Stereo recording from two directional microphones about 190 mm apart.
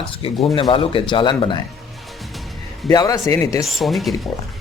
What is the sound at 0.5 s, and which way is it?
Speech, 30° left (ahead or behind).